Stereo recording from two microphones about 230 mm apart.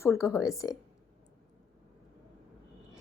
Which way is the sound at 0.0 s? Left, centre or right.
Centre.